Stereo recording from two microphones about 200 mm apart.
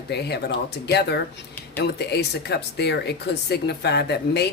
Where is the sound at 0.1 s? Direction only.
55° left (ahead or behind).